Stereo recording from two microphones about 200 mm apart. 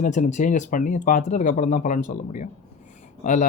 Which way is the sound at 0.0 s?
40° left (ahead or behind).